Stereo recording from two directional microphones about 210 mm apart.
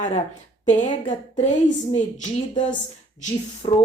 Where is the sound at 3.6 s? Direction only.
25° left (ahead or behind).